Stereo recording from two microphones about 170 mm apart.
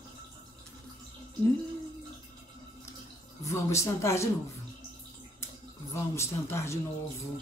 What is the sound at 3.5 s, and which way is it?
Speech, 15° left (ahead or behind).